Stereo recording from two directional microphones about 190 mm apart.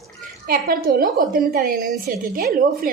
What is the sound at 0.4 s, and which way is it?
A woman's voice, 50° right (ahead or behind).